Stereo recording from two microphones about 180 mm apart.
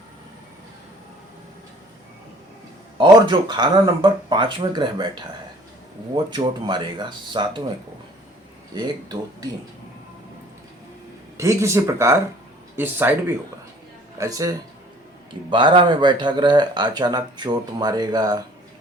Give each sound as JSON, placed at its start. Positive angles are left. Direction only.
{"t": 3.0, "sound": "speech", "side_deg": -25}
{"t": 8.7, "sound": "speech", "side_deg": -20}
{"t": 11.3, "sound": "speech", "side_deg": -15}